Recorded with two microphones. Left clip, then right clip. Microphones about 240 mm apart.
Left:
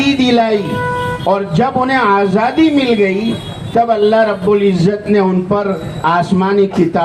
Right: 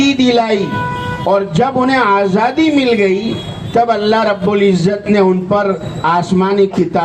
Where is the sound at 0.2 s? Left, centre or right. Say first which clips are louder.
Even; right.